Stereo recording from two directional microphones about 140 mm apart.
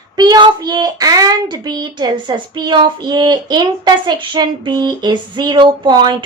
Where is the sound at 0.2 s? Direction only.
30° right (ahead or behind).